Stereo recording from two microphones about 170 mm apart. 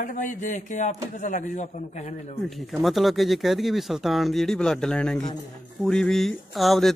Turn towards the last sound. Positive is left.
turn(degrees=0)  # may be behind; listen again after turning